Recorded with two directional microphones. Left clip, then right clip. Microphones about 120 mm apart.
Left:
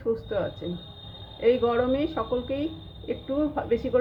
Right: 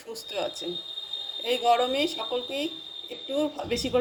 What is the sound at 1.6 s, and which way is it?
Speech, 15° right (ahead or behind).